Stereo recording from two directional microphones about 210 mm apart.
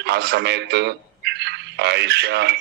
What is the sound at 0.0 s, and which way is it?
A man's voice, 50° right (ahead or behind).